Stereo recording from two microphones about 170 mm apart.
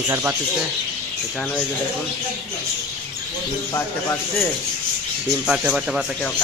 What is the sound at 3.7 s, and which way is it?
Speech, 15° left (ahead or behind).